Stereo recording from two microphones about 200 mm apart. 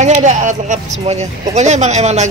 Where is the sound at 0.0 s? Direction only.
40° right (ahead or behind).